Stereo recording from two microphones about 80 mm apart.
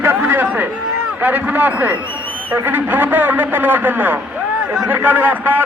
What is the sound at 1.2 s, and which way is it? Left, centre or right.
A man's voice, right.